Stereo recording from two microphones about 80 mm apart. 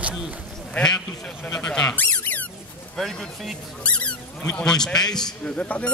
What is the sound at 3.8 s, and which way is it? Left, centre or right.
A man's voice, centre.